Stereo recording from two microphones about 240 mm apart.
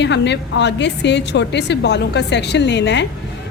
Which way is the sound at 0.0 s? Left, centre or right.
Left.